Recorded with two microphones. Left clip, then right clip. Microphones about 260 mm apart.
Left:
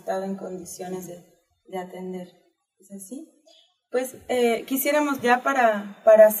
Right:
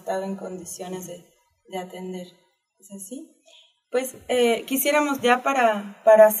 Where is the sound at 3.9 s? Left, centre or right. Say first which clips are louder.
Right 1 dB; centre.